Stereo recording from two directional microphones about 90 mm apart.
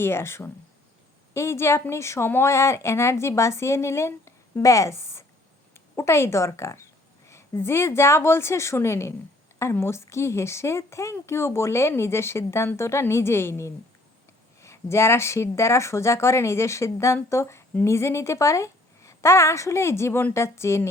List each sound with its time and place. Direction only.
0.0 s a woman's voice: 30° left (ahead or behind)